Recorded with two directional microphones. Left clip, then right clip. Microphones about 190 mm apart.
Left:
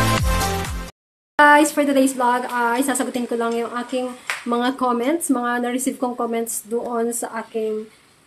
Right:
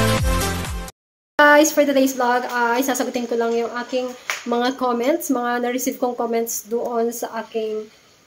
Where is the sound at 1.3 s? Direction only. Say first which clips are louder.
Even; centre (ahead or behind).